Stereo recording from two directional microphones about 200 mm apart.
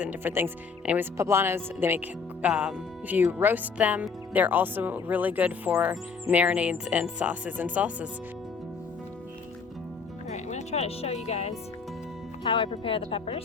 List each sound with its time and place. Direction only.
0.0 s speech: 10° right (ahead or behind)
10.2 s music: 35° left (ahead or behind)
12.4 s speech: 25° left (ahead or behind)